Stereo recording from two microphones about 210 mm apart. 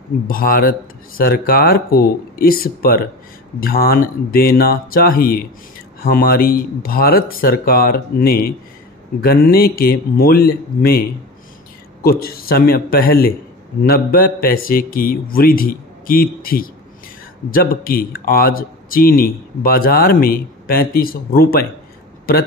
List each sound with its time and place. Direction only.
0.3 s a man's voice: 45° left (ahead or behind)